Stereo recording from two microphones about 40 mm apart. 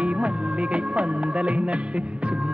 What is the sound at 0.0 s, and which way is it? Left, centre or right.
Music, right.